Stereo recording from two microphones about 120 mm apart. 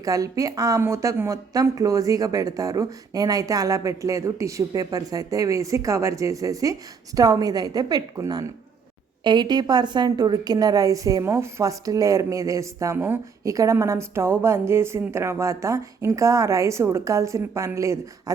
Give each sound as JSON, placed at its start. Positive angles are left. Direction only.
{"t": 0.0, "sound": "a woman's voice", "side_deg": -30}